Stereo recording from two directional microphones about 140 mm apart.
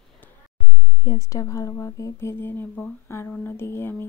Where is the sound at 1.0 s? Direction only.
25° left (ahead or behind).